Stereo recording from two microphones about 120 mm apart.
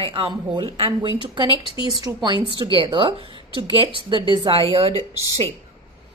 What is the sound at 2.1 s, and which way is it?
Speech, 20° right (ahead or behind).